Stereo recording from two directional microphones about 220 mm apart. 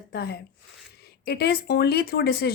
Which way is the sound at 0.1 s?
45° left (ahead or behind).